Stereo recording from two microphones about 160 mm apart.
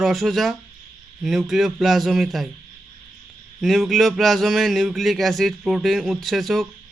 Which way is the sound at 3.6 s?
Centre (ahead or behind).